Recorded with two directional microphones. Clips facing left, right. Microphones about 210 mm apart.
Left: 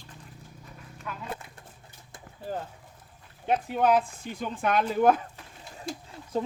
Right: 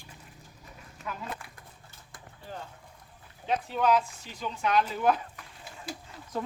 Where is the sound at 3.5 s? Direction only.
55° left (ahead or behind).